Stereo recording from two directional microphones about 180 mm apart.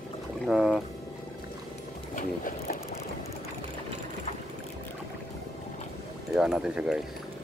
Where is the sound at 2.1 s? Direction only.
50° left (ahead or behind).